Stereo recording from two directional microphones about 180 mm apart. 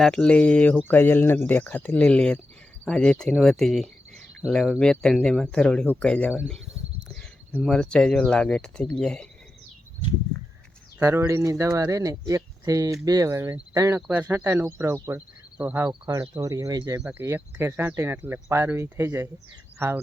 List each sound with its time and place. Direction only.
0.0 s speech: 5° left (ahead or behind)
11.0 s speech: 15° right (ahead or behind)
17.0 s speech: 10° right (ahead or behind)